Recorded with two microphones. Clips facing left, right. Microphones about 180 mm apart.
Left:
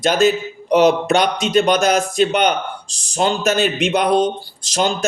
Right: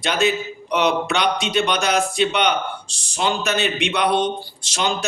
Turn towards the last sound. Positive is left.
turn(degrees=40)  # may be behind; listen again after turning